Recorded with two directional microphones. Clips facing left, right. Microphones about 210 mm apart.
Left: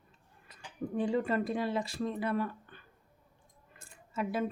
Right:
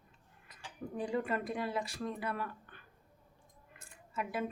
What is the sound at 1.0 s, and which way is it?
Speech, 25° left (ahead or behind).